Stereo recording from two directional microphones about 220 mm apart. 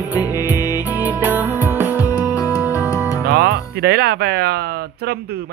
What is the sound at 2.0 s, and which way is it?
Music, 15° left (ahead or behind).